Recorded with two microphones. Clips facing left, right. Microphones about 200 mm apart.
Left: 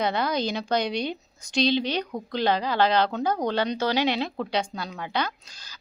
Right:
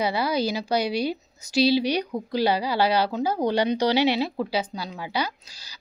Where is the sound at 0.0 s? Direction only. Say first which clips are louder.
Right 1 dB; 10° right (ahead or behind).